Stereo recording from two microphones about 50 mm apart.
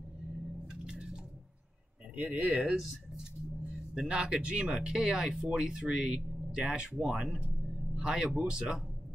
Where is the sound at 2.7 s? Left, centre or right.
Centre.